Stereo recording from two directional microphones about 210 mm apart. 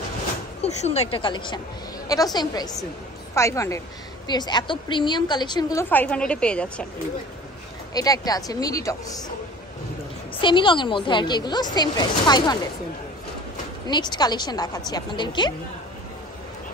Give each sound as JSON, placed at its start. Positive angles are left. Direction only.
{"t": 0.8, "sound": "a woman's voice", "side_deg": 30}
{"t": 7.9, "sound": "speech", "side_deg": 15}
{"t": 10.4, "sound": "a woman's voice", "side_deg": 25}
{"t": 13.8, "sound": "a woman's voice", "side_deg": 20}